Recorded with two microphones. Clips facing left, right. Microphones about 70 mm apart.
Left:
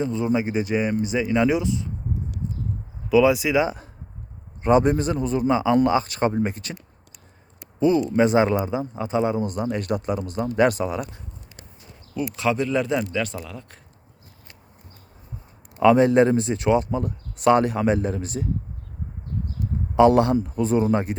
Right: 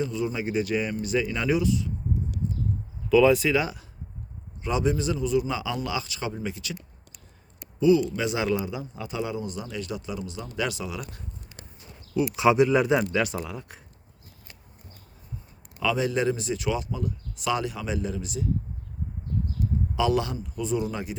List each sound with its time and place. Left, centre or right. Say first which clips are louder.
0.0 s speech: left 5 dB; left
3.1 s speech: left 1 dB; centre
4.6 s speech: left 7 dB; left
7.8 s a man's voice: left 3 dB; left
9.4 s speech: left 8 dB; left
12.4 s speech: right 3 dB; centre
15.8 s speech: left 10 dB; left
20.0 s speech: left 10 dB; left